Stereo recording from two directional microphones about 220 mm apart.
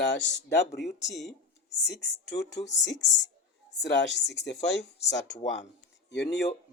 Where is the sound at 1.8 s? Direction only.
50° left (ahead or behind).